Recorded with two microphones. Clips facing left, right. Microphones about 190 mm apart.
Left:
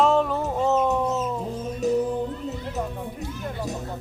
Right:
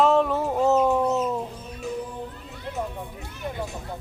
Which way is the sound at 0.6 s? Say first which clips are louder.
Right 2 dB; 10° right (ahead or behind).